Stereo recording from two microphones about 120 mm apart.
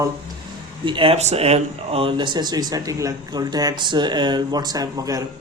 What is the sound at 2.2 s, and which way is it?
Speech, 40° right (ahead or behind).